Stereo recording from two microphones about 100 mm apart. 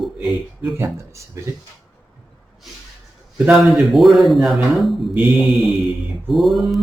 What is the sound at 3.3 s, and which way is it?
Speech, 15° right (ahead or behind).